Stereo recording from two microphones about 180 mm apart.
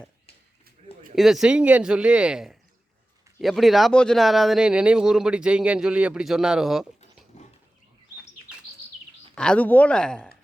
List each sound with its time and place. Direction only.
1.1 s speech: centre (ahead or behind)
7.3 s a sound: 40° left (ahead or behind)
9.3 s speech: 5° left (ahead or behind)